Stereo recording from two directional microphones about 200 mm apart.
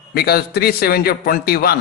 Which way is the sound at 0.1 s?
50° left (ahead or behind).